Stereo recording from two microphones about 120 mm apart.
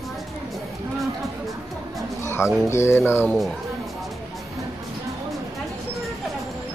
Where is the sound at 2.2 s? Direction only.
20° left (ahead or behind).